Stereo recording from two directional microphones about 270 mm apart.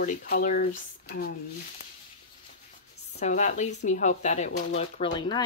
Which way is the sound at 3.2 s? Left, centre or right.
Left.